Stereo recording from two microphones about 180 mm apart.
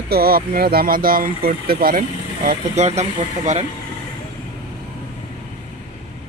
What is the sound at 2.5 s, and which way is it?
Speech, 40° right (ahead or behind).